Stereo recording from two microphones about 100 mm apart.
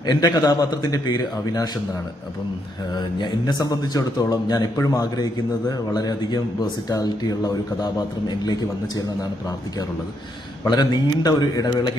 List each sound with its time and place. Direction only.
0.0 s speech: 45° left (ahead or behind)
3.0 s speech: 50° left (ahead or behind)
10.6 s speech: 40° left (ahead or behind)